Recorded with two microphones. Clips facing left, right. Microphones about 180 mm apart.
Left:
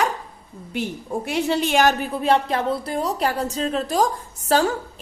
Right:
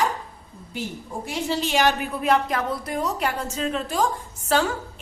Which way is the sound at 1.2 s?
60° left (ahead or behind).